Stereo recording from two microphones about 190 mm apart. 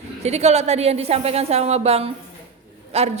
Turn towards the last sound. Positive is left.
turn(degrees=-30)  # may be behind; listen again after turning